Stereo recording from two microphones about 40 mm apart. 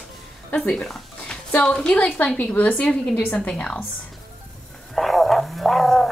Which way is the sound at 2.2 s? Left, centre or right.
Left.